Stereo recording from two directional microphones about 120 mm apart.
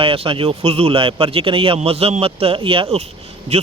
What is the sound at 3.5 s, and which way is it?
Speech, 65° right (ahead or behind).